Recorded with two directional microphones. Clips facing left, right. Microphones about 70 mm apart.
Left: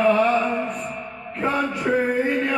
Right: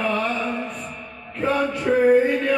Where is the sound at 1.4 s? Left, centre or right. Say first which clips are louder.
Right 1 dB; centre.